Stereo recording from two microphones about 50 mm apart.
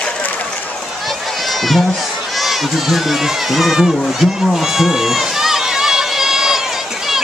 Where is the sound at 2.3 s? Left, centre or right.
Centre.